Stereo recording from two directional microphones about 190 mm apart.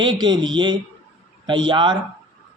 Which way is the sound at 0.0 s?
25° right (ahead or behind).